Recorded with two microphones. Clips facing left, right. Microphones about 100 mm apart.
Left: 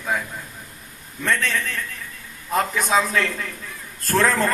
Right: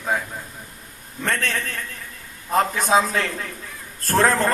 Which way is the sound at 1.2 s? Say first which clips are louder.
Left 2 dB; 45° right (ahead or behind).